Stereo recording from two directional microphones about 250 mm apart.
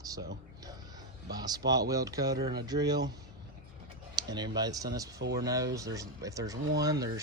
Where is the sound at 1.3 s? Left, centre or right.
Centre.